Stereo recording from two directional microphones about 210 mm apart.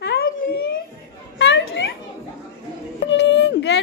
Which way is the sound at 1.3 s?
55° left (ahead or behind).